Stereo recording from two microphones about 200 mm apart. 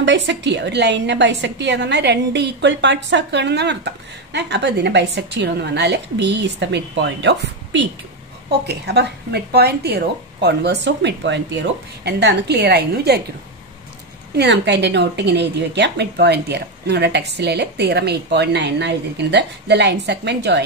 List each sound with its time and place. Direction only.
0.0 s a woman's voice: 60° right (ahead or behind)
14.3 s a woman's voice: 60° right (ahead or behind)